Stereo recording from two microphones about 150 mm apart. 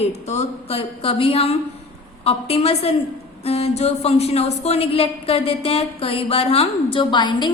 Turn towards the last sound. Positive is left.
turn(degrees=30)  # may be behind; listen again after turning